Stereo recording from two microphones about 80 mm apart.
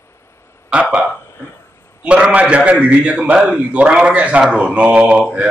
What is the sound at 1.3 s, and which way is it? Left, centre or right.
Burping, left.